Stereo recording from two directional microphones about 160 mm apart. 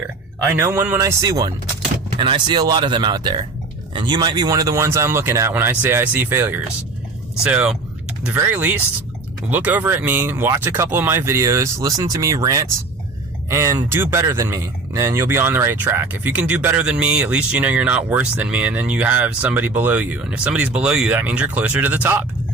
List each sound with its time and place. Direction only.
0.5 s speech: 15° right (ahead or behind)